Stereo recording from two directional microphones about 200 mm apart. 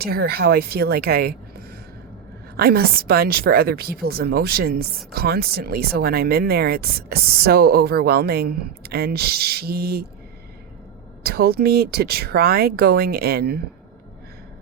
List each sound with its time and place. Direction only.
0.0 s speech: 50° right (ahead or behind)
11.2 s speech: 50° right (ahead or behind)